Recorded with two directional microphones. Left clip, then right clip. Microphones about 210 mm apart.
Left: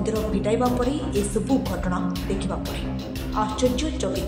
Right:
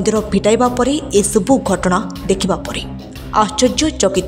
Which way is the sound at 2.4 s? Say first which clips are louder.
Right 10 dB; 50° right (ahead or behind).